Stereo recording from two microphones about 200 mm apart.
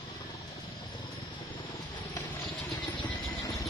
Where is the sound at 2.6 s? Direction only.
20° left (ahead or behind).